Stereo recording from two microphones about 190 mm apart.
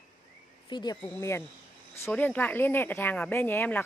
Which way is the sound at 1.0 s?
15° left (ahead or behind).